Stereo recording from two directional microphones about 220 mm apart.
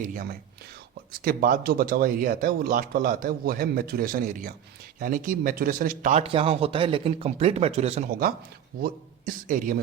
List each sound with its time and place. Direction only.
0.1 s speech: 40° right (ahead or behind)